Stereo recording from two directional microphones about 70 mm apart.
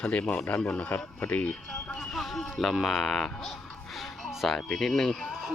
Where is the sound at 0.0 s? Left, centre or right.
Centre.